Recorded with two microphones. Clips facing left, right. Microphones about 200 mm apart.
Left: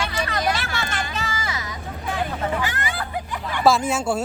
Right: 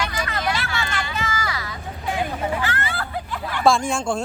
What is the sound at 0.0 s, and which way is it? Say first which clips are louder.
Vehicle: left 1 dB; 25° left (ahead or behind).